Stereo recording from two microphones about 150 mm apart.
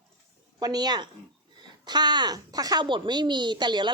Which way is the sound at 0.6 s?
25° right (ahead or behind).